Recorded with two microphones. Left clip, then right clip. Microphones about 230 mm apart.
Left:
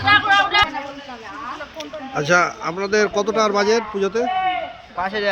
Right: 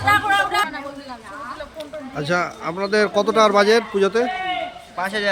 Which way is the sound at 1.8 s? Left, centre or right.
Centre.